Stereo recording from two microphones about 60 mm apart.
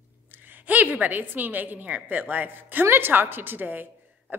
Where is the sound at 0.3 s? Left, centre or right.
Right.